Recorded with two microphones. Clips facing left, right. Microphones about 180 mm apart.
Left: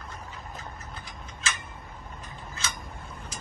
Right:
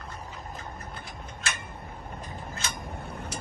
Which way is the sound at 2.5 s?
60° right (ahead or behind).